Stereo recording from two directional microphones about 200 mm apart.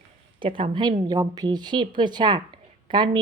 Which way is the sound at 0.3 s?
25° right (ahead or behind).